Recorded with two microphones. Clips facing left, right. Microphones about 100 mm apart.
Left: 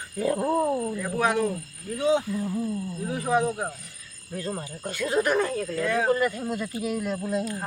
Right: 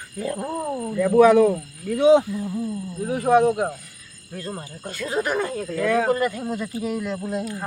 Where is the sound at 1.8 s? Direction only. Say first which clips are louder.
Right 8 dB; 75° right (ahead or behind).